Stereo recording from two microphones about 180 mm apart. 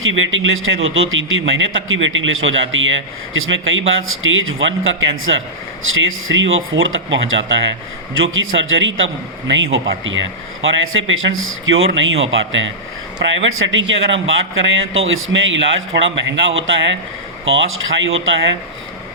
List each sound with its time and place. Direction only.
0.0 s a man's voice: 90° right
17.4 s a man's voice: 90° right